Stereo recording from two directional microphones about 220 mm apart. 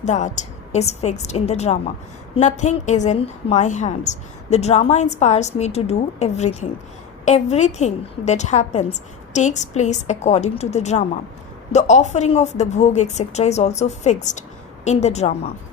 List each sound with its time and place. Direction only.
0.0 s a woman's voice: 30° left (ahead or behind)